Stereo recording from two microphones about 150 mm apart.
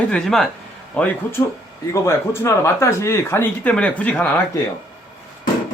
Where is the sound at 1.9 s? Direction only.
20° left (ahead or behind).